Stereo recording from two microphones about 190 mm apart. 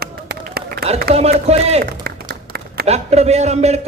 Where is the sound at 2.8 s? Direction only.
35° right (ahead or behind).